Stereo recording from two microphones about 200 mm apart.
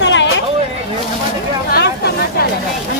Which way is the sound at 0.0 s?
60° left (ahead or behind).